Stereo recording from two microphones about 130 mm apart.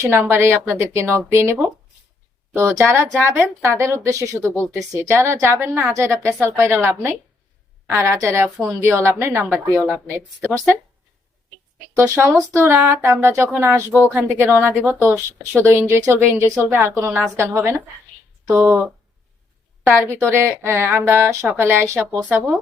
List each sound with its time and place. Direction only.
0.0 s speech: 20° right (ahead or behind)
2.6 s speech: 20° right (ahead or behind)
11.9 s speech: 15° right (ahead or behind)